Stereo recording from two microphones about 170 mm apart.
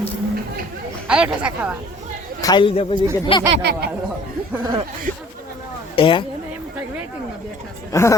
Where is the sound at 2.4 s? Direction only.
25° left (ahead or behind).